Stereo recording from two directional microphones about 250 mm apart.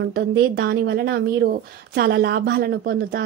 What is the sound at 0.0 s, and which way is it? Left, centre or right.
Speech, right.